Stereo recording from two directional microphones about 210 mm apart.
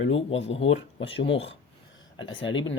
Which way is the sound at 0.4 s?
30° left (ahead or behind).